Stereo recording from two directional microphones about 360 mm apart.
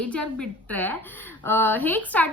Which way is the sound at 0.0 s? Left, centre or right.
Centre.